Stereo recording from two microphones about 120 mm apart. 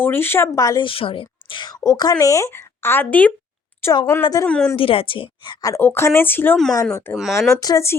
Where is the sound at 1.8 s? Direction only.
30° left (ahead or behind).